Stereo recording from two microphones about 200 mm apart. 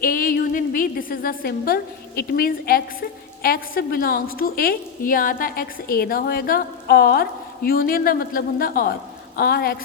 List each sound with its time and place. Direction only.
0.0 s a woman's voice: 45° left (ahead or behind)